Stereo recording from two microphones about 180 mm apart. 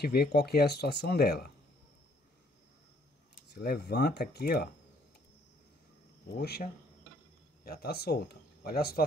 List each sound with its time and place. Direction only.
0.0 s speech: 60° left (ahead or behind)
3.5 s speech: 65° left (ahead or behind)
6.2 s speech: 65° left (ahead or behind)